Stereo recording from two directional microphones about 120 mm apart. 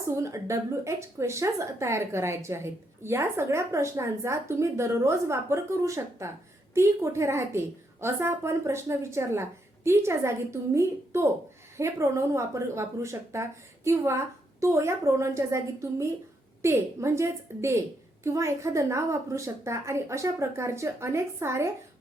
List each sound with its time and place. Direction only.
0.0 s a woman's voice: 25° right (ahead or behind)